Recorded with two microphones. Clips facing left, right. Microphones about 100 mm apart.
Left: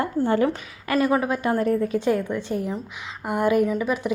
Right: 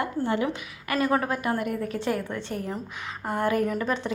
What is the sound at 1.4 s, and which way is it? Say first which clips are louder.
Speech: left 6 dB; 30° left (ahead or behind).